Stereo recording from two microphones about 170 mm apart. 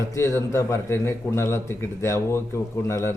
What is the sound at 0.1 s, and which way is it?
A man's voice, 15° left (ahead or behind).